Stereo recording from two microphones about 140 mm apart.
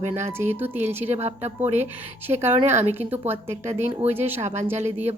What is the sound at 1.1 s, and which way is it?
Speech, 50° right (ahead or behind).